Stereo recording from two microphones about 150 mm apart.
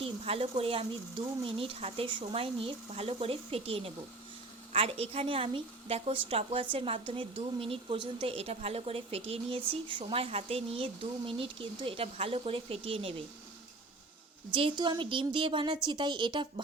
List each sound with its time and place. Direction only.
0.0 s a woman's voice: 40° right (ahead or behind)
14.5 s a woman's voice: 35° right (ahead or behind)